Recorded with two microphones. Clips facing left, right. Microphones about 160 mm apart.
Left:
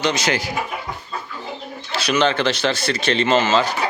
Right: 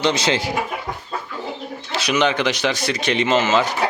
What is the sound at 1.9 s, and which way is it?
Speech, 20° right (ahead or behind).